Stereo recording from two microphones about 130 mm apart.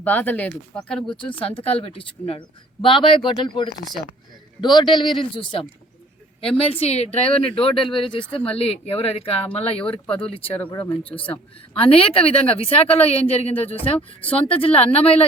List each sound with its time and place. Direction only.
0.0 s speech: 15° left (ahead or behind)
1.5 s a woman's voice: 50° left (ahead or behind)
6.6 s a woman's voice: 50° left (ahead or behind)
9.8 s speech: 10° left (ahead or behind)
11.7 s a woman's voice: 45° left (ahead or behind)